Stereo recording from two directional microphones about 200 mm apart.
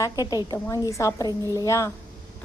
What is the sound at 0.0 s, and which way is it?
A woman's voice, 20° left (ahead or behind).